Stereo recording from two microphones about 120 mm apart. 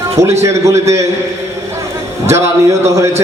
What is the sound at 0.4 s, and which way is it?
Speech, 25° right (ahead or behind).